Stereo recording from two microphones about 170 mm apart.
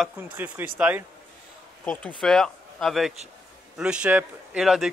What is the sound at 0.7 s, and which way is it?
Speech, 5° right (ahead or behind).